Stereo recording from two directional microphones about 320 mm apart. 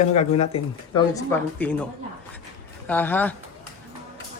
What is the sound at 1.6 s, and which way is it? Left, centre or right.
Speech, centre.